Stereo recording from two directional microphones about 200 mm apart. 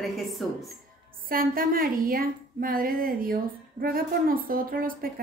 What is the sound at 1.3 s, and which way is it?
A woman's voice, 45° right (ahead or behind).